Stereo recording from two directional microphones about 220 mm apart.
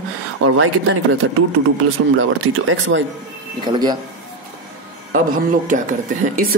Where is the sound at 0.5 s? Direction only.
65° right (ahead or behind).